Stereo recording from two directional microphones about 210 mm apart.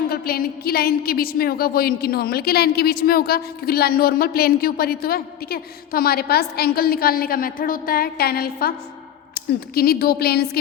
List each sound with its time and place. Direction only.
0.1 s a woman's voice: 45° left (ahead or behind)